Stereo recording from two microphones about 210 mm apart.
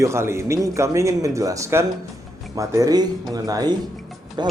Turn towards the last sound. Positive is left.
turn(degrees=-20)  # may be behind; listen again after turning